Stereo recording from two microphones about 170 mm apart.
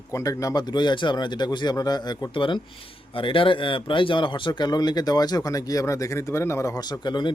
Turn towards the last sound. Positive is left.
turn(degrees=25)  # may be behind; listen again after turning